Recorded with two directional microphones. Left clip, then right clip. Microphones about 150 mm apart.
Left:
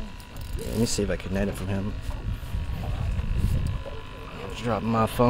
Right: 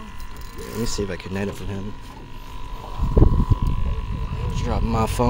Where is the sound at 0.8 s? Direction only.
30° left (ahead or behind).